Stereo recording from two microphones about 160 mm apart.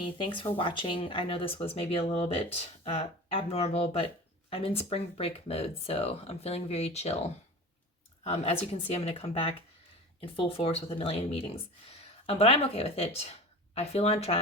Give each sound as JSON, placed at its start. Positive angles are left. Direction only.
{"t": 0.0, "sound": "speech", "side_deg": 30}
{"t": 8.2, "sound": "speech", "side_deg": 40}